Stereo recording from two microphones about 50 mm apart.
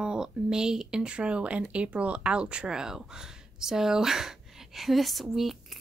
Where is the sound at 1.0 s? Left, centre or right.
Right; by 5.8 s centre.